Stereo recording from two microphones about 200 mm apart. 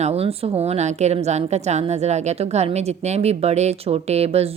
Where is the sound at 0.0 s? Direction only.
30° right (ahead or behind).